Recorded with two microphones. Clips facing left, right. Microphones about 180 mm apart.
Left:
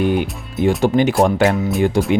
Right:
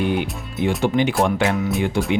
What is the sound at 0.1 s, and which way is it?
Speech, 40° left (ahead or behind).